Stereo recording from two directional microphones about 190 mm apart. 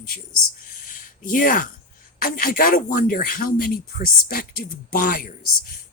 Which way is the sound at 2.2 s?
50° left (ahead or behind).